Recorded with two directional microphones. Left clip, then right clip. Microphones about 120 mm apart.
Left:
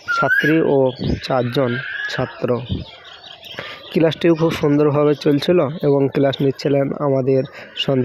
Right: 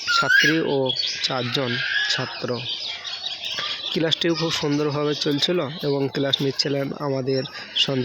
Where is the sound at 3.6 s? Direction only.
45° left (ahead or behind).